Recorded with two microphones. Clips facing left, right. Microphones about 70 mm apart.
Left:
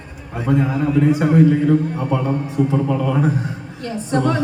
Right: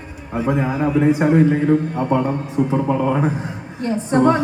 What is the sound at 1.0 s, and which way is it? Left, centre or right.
A woman's voice, right.